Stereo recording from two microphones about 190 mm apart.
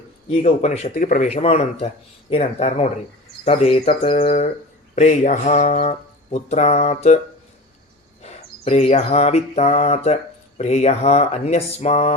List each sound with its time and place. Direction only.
0.3 s speech: 35° left (ahead or behind)
8.2 s bird: 35° left (ahead or behind)
10.6 s speech: 35° left (ahead or behind)